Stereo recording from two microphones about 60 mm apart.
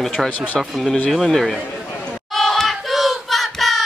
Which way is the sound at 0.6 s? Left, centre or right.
Centre.